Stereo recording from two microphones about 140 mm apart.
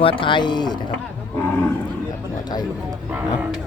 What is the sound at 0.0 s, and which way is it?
Speech, 40° left (ahead or behind).